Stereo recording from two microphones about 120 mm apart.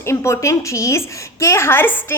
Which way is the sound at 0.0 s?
20° left (ahead or behind).